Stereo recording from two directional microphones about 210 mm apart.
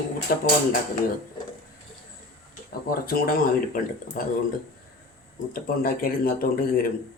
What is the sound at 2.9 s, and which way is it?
Speech, 45° left (ahead or behind).